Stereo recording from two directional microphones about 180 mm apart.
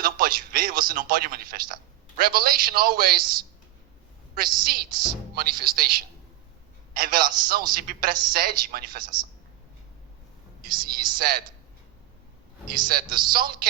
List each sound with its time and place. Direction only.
0.0 s a man's voice: 55° right (ahead or behind)
4.6 s a woman's voice: 55° right (ahead or behind)
10.6 s a woman's voice: 55° right (ahead or behind)
12.9 s a man's voice: 55° right (ahead or behind)